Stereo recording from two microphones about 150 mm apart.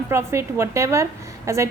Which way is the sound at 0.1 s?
15° right (ahead or behind).